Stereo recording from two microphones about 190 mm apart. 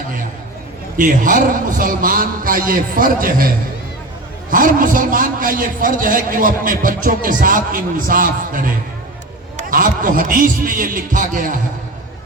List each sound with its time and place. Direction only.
0.9 s a man's voice: 45° right (ahead or behind)
4.5 s a man's voice: 45° right (ahead or behind)